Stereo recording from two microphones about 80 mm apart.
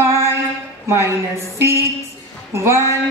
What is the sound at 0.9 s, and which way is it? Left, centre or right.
A woman's voice, right.